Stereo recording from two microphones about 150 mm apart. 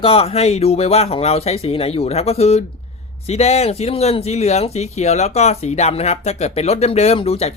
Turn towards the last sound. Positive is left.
turn(degrees=40)  # may be behind; listen again after turning